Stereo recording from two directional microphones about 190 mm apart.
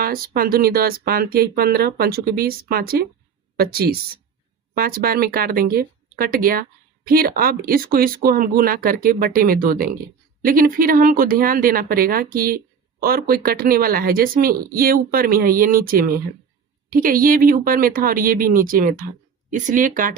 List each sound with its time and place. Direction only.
0.0 s a woman's voice: 50° right (ahead or behind)